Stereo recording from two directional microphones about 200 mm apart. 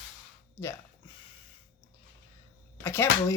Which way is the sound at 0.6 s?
15° left (ahead or behind).